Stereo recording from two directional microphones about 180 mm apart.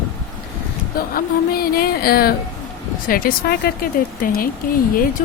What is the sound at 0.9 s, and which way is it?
A woman's voice, 55° left (ahead or behind).